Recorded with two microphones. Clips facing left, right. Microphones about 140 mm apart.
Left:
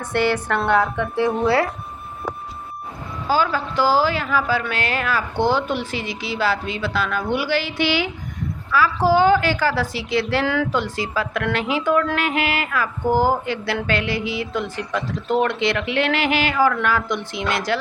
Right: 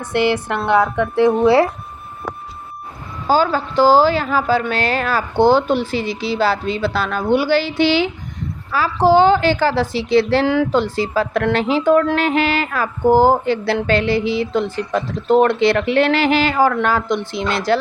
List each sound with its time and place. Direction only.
0.1 s a woman's voice: 10° right (ahead or behind)
1.2 s a woman's voice: 25° right (ahead or behind)
3.2 s a woman's voice: 30° right (ahead or behind)